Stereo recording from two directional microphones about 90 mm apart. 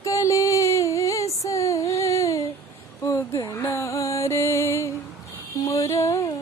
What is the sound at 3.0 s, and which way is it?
Music, 35° left (ahead or behind).